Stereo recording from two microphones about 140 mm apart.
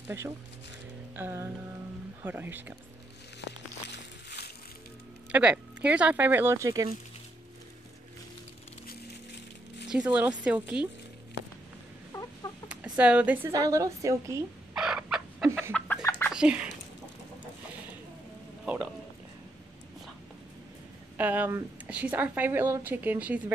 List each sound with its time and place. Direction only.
1.1 s music: 15° right (ahead or behind)
2.2 s a woman's voice: 15° right (ahead or behind)
5.3 s a woman's voice: 10° right (ahead or behind)
9.8 s a woman's voice: 5° right (ahead or behind)
12.1 s chicken: 20° left (ahead or behind)
12.6 s a sound: 10° right (ahead or behind)
13.5 s a woman's voice: 25° right (ahead or behind)
14.8 s chicken: 5° right (ahead or behind)
16.0 s chicken: 20° left (ahead or behind)
16.3 s speech: 10° right (ahead or behind)
21.2 s a woman's voice: 10° right (ahead or behind)